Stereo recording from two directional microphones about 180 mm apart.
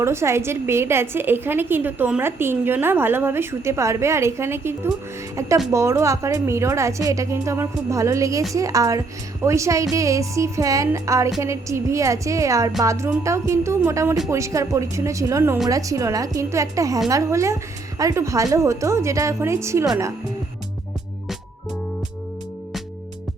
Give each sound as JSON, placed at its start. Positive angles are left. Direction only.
{"t": 0.0, "sound": "a woman's voice", "side_deg": -15}